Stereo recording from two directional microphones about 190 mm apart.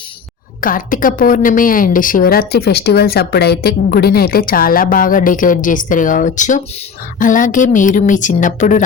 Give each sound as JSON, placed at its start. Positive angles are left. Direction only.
{"t": 0.6, "sound": "a woman's voice", "side_deg": 45}